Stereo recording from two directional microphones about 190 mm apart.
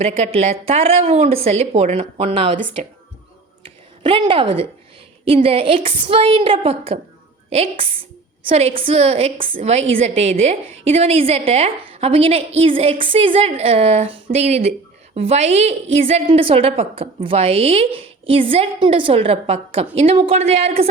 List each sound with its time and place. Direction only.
0.0 s a woman's voice: 35° right (ahead or behind)
4.0 s a woman's voice: 25° right (ahead or behind)